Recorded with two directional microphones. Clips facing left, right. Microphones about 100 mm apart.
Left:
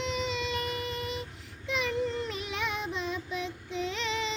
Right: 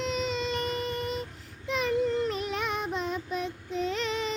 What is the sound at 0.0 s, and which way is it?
Child singing, 45° right (ahead or behind).